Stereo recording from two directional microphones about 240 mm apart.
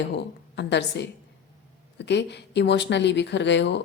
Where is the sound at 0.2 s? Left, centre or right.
Left.